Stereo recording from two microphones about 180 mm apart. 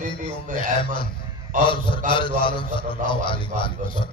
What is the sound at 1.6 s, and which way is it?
A man's voice, 30° left (ahead or behind).